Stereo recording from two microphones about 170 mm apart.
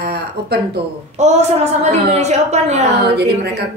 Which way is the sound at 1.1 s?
40° right (ahead or behind).